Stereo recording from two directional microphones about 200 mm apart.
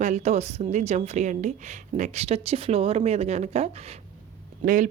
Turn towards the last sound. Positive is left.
turn(degrees=-40)  # may be behind; listen again after turning